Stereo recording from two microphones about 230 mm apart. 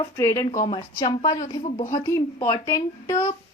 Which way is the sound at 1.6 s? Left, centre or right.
Left.